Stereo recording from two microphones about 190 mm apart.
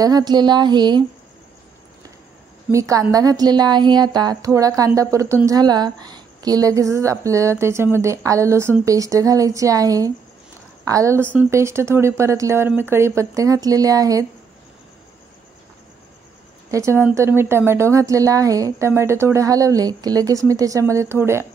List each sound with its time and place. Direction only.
0.0 s a woman's voice: 20° right (ahead or behind)
2.7 s a woman's voice: 15° right (ahead or behind)
16.7 s a woman's voice: 15° right (ahead or behind)